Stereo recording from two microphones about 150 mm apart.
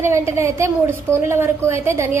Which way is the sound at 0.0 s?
20° right (ahead or behind).